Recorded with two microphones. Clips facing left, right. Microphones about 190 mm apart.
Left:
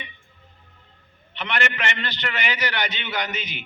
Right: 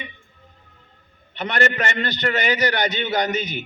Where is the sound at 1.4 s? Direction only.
40° right (ahead or behind).